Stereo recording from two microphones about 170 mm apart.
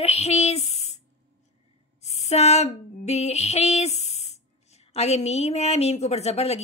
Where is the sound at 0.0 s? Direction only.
40° left (ahead or behind).